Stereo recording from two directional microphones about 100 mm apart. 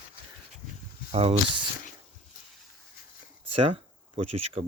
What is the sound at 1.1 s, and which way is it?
Speech, 90° right.